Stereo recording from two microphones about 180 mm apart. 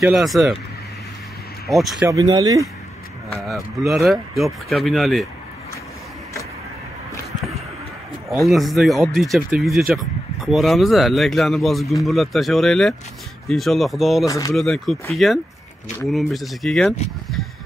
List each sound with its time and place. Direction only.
0.0 s speech: centre (ahead or behind)
1.7 s speech: centre (ahead or behind)
2.0 s speech: 20° right (ahead or behind)
3.4 s speech: centre (ahead or behind)
8.3 s speech: centre (ahead or behind)
14.2 s speech: 20° left (ahead or behind)
14.5 s speech: centre (ahead or behind)